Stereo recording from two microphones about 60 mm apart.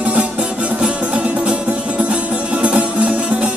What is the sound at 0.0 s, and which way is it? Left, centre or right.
Music, centre.